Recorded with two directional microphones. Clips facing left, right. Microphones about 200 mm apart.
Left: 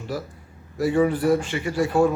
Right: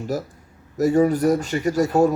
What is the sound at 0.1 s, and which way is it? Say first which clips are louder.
Speech: right 1 dB; 45° right (ahead or behind).